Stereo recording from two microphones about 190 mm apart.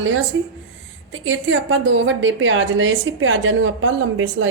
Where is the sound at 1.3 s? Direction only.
90° right.